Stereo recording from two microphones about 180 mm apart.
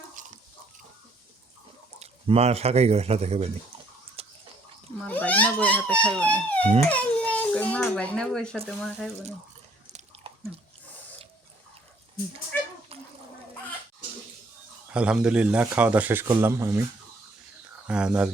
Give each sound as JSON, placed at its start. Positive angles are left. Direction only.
{"t": 0.2, "sound": "pig", "side_deg": -45}
{"t": 2.0, "sound": "speech", "side_deg": -35}
{"t": 4.2, "sound": "bathtub", "side_deg": -30}
{"t": 4.9, "sound": "a child's voice", "side_deg": 10}
{"t": 10.3, "sound": "biting", "side_deg": -30}
{"t": 14.9, "sound": "speech", "side_deg": -5}
{"t": 17.8, "sound": "speech", "side_deg": -5}